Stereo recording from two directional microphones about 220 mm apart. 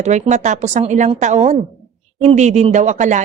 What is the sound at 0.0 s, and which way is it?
A woman's voice, 30° right (ahead or behind).